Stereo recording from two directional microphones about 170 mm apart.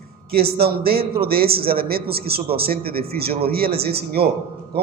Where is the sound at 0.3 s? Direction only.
65° right (ahead or behind).